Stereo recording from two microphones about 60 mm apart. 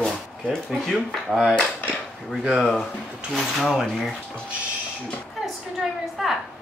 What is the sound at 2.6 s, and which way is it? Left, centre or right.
Speech, centre.